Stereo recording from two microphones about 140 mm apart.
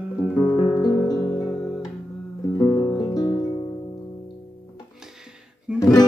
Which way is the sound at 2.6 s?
15° left (ahead or behind).